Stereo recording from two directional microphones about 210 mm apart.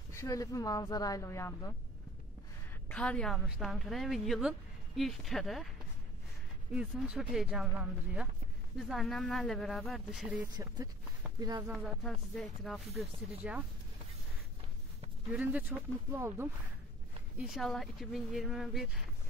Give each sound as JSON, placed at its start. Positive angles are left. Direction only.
{"t": 0.1, "sound": "speech", "side_deg": 15}
{"t": 2.9, "sound": "a woman's voice", "side_deg": 5}
{"t": 6.7, "sound": "a woman's voice", "side_deg": -5}
{"t": 10.5, "sound": "speech", "side_deg": -20}
{"t": 11.7, "sound": "a woman's voice", "side_deg": 0}
{"t": 15.3, "sound": "a woman's voice", "side_deg": -5}
{"t": 17.4, "sound": "a woman's voice", "side_deg": 0}